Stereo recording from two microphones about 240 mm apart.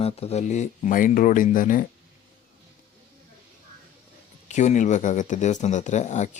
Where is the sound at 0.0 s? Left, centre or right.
Left.